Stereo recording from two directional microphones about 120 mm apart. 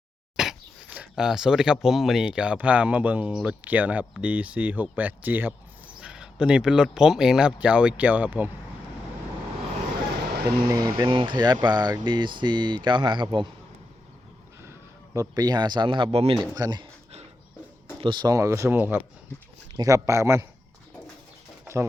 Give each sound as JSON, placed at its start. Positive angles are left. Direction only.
{"t": 0.3, "sound": "speech", "side_deg": -5}
{"t": 10.6, "sound": "speech", "side_deg": -35}
{"t": 14.6, "sound": "speech", "side_deg": -25}
{"t": 16.6, "sound": "speech", "side_deg": -35}
{"t": 18.0, "sound": "speech", "side_deg": -40}
{"t": 19.7, "sound": "speech", "side_deg": -30}